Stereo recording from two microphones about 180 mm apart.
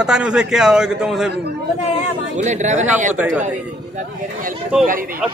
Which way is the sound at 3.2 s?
10° right (ahead or behind).